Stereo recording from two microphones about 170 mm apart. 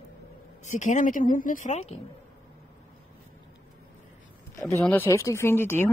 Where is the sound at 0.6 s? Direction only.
45° left (ahead or behind).